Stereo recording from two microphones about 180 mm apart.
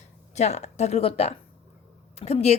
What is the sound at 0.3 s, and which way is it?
Speech, 40° left (ahead or behind).